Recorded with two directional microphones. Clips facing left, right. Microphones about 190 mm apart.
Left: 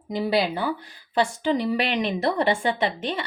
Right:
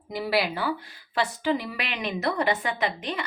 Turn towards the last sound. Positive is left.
turn(degrees=30)  # may be behind; listen again after turning